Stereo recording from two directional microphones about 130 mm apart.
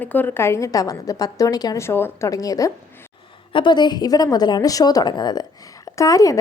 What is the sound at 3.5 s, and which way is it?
A woman's voice, 40° left (ahead or behind).